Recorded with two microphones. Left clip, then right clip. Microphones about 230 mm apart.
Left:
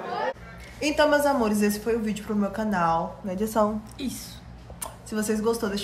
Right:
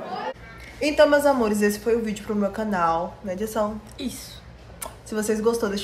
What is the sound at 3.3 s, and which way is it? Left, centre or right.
Speech, left.